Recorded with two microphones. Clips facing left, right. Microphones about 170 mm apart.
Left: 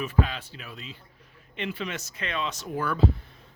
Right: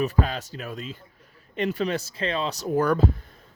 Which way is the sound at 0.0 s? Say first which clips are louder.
Right 3 dB; 40° right (ahead or behind).